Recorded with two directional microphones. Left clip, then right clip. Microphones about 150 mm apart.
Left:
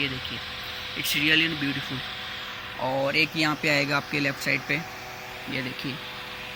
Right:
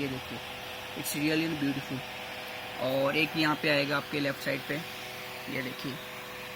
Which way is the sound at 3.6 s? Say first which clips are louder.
Left 4 dB; 20° left (ahead or behind).